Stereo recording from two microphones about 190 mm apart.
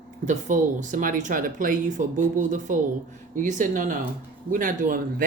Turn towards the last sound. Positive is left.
turn(degrees=-45)  # may be behind; listen again after turning